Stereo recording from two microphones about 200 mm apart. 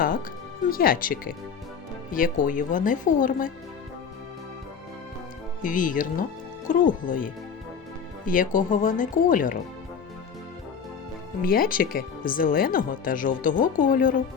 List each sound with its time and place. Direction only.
0.7 s speech: 45° left (ahead or behind)
5.6 s speech: 40° left (ahead or behind)
11.4 s speech: 45° left (ahead or behind)